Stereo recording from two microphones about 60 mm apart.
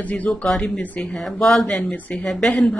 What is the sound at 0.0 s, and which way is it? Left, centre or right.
Speech, left.